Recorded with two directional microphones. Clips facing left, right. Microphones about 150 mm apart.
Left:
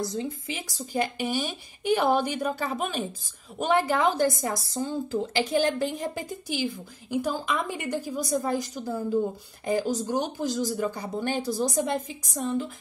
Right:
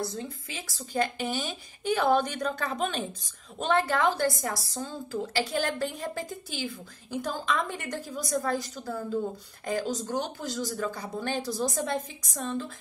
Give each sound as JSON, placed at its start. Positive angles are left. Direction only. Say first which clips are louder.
{"t": 0.2, "sound": "speech", "louder": "left 6 dB", "side_deg": 15}